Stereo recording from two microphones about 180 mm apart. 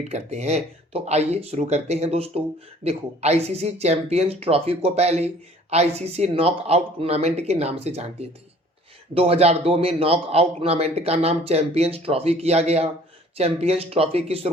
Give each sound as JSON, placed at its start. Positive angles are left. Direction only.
{"t": 0.1, "sound": "a man's voice", "side_deg": -35}